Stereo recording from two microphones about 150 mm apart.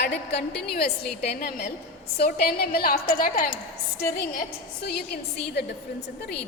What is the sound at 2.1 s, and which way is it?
A woman's voice, 90° left.